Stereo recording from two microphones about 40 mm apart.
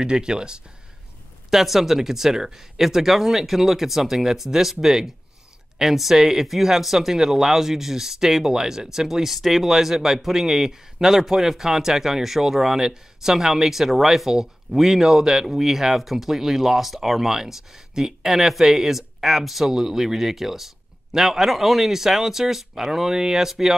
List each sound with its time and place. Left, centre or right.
0.0 s speech: right
1.5 s speech: centre